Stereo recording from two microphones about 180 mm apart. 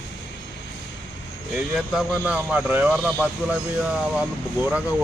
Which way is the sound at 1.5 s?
5° right (ahead or behind).